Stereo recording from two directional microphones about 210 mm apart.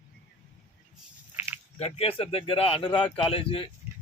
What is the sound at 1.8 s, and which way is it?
A man's voice, 30° left (ahead or behind).